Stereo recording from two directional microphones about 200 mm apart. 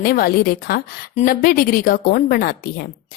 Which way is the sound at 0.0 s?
50° left (ahead or behind).